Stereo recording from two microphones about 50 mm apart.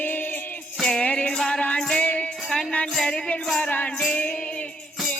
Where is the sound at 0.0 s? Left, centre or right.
Left.